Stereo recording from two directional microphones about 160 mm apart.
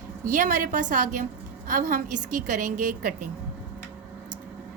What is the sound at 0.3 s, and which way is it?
A woman's voice, 55° right (ahead or behind).